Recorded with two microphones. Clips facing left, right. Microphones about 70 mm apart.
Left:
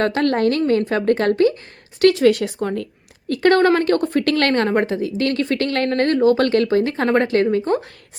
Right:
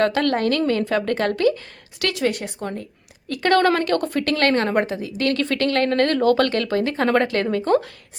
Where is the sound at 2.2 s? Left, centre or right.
Left.